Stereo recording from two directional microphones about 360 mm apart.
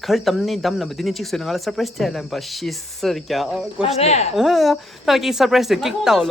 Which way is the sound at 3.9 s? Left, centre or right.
Centre.